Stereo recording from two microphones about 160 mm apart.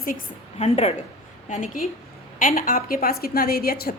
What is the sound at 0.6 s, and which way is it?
A woman's voice, 45° left (ahead or behind).